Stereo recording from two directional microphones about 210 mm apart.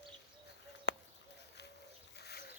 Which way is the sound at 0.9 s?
55° left (ahead or behind).